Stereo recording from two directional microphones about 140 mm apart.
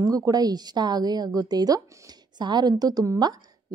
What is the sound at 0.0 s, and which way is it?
A woman's voice, 25° right (ahead or behind).